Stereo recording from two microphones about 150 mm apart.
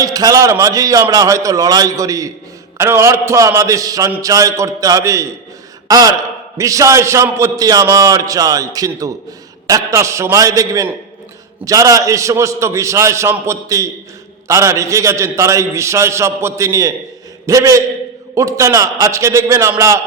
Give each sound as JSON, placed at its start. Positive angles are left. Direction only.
{"t": 0.0, "sound": "a man's voice", "side_deg": -25}